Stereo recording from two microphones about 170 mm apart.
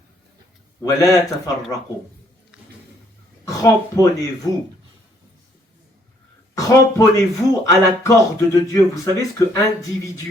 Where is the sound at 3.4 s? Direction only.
20° left (ahead or behind).